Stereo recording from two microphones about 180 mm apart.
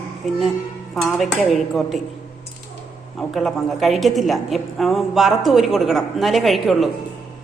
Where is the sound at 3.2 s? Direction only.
Centre (ahead or behind).